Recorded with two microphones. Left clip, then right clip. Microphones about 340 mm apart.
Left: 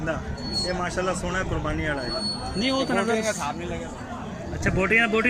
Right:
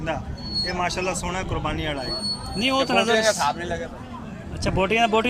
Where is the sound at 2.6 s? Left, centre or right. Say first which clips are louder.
Right 4 dB; centre.